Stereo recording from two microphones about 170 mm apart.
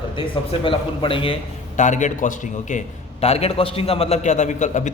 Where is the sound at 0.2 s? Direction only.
30° left (ahead or behind).